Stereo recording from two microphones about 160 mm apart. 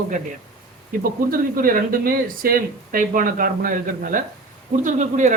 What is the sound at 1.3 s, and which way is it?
Speech, 60° right (ahead or behind).